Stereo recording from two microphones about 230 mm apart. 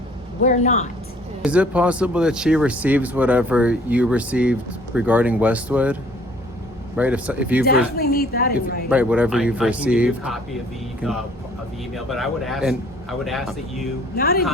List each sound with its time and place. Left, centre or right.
0.4 s speech: left
1.4 s speech: centre
7.9 s a woman's voice: left
8.9 s speech: centre
11.9 s speech: centre
14.2 s speech: left